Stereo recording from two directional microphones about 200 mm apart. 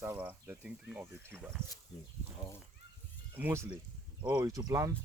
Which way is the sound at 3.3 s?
10° right (ahead or behind).